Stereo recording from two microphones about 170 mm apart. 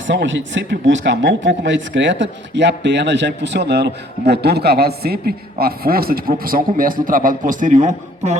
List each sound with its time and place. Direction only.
0.1 s speech: 90° right; by 8.4 s 45° right (ahead or behind)